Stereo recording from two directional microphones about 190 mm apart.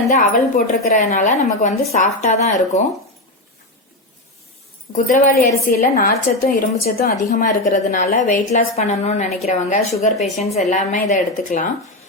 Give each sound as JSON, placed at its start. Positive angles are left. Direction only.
{"t": 0.1, "sound": "a woman's voice", "side_deg": 40}
{"t": 4.9, "sound": "a woman's voice", "side_deg": 40}